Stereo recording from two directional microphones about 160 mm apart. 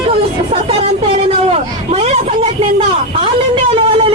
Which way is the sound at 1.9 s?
40° right (ahead or behind).